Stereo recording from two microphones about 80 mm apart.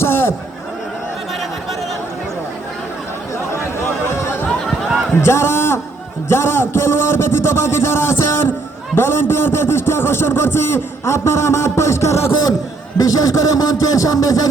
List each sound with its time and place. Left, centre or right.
0.0 s a sound: left
4.2 s chatter: left
5.2 s a man's voice: left
13.0 s speech: left